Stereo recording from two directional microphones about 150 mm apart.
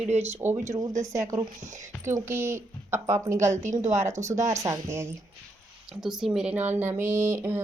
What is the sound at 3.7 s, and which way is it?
Speech, 50° right (ahead or behind).